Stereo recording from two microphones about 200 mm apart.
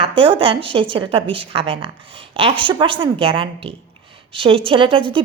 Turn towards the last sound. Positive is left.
turn(degrees=-25)  # may be behind; listen again after turning